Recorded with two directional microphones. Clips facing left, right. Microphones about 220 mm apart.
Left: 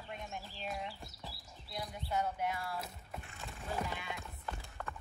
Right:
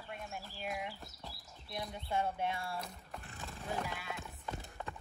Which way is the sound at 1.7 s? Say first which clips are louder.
Right 1 dB; 25° right (ahead or behind).